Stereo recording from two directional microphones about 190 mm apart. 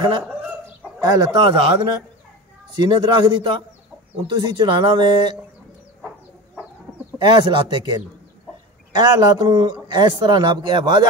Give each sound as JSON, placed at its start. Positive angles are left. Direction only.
{"t": 1.0, "sound": "a man's voice", "side_deg": -20}
{"t": 7.2, "sound": "a man's voice", "side_deg": -25}